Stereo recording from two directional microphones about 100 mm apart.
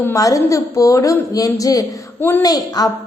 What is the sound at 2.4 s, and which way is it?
Speech, 40° left (ahead or behind).